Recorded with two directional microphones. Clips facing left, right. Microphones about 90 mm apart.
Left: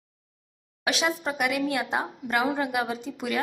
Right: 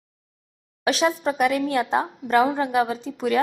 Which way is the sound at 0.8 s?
35° right (ahead or behind).